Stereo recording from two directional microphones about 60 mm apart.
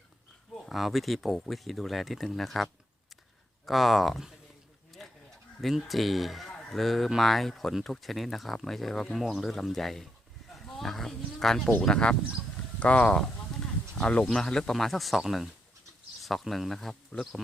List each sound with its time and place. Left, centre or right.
0.7 s speech: centre
3.7 s speech: centre
4.9 s a sound: centre
5.7 s speech: centre